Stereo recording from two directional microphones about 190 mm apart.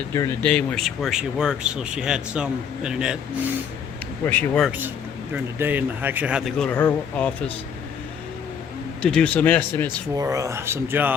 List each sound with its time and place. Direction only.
0.4 s speech: 5° left (ahead or behind)
4.3 s speech: 5° left (ahead or behind)
5.3 s speech: 10° right (ahead or behind); by 7.5 s 10° left (ahead or behind)
9.0 s speech: 5° left (ahead or behind)
10.2 s speech: 15° right (ahead or behind)